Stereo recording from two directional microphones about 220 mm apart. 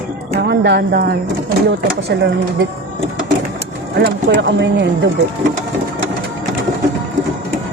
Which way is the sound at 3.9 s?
50° right (ahead or behind).